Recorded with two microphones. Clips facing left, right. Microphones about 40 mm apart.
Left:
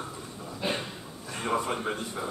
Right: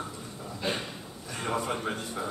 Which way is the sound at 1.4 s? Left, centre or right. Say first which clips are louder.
Left 2 dB; centre.